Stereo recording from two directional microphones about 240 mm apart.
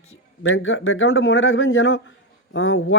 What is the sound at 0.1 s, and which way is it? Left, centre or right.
Speech, left.